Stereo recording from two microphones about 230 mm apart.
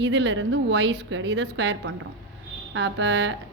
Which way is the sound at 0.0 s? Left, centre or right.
Right.